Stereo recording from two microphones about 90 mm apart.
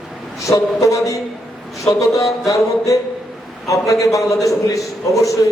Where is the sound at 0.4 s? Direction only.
35° left (ahead or behind).